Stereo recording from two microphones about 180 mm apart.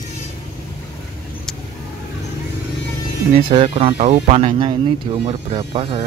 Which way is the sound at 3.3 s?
30° right (ahead or behind).